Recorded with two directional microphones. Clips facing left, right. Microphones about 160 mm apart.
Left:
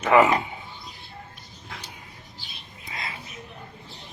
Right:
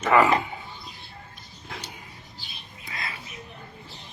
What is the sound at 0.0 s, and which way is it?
Speech, 20° left (ahead or behind).